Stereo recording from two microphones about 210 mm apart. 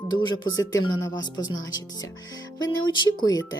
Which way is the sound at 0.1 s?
20° left (ahead or behind).